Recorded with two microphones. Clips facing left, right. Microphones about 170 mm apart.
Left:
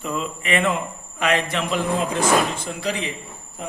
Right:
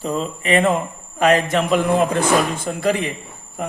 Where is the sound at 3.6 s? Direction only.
60° right (ahead or behind).